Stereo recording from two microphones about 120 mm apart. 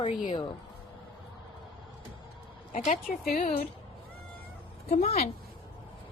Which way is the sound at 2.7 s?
90° left.